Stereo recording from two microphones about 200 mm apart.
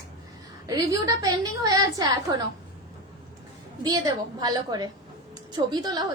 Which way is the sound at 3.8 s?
20° right (ahead or behind).